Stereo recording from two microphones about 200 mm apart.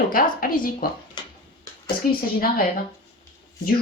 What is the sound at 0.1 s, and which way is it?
Speech, 45° left (ahead or behind).